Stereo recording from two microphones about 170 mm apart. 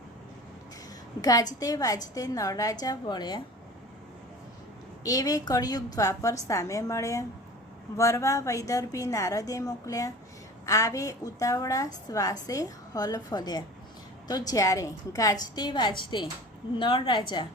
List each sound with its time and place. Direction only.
1.2 s a woman's voice: 20° left (ahead or behind)
5.0 s a woman's voice: 20° left (ahead or behind)